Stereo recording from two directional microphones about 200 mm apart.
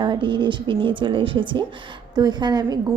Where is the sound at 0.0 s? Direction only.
25° right (ahead or behind).